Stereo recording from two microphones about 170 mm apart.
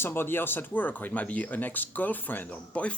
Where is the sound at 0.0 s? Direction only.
15° left (ahead or behind).